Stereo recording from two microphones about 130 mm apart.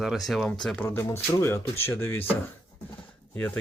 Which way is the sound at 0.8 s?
20° left (ahead or behind).